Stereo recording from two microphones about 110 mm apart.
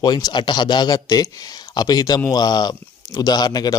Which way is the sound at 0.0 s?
40° left (ahead or behind).